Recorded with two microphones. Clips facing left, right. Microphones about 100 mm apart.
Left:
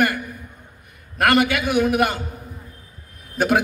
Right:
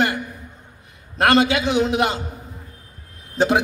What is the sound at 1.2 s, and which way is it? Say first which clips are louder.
A man's voice: right 1 dB; 25° right (ahead or behind).